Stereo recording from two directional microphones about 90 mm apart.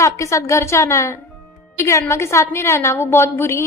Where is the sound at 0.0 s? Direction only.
35° left (ahead or behind).